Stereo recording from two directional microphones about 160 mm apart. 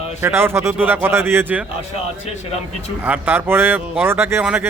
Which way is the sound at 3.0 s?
10° right (ahead or behind).